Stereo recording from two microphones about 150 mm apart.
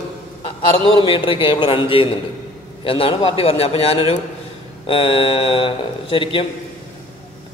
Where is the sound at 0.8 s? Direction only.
35° left (ahead or behind).